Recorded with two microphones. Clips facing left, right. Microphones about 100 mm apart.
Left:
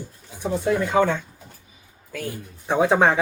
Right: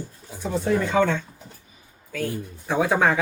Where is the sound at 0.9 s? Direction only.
15° left (ahead or behind).